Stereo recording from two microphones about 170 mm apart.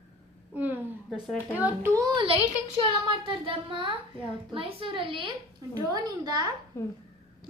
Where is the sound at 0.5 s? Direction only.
10° right (ahead or behind).